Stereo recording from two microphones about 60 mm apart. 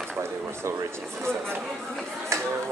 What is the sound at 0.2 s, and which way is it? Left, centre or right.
Speech, right.